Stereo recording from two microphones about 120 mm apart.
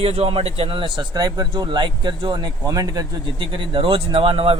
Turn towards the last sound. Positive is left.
turn(degrees=-50)  # may be behind; listen again after turning